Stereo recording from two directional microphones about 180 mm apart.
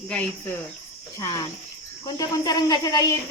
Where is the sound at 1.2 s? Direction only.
20° left (ahead or behind).